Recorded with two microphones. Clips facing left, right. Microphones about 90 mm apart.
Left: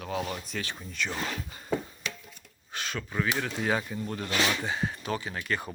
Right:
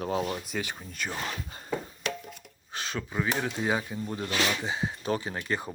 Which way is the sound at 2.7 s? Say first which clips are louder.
Right 1 dB; 30° right (ahead or behind).